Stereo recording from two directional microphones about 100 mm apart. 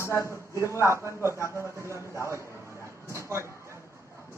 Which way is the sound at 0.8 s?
25° right (ahead or behind).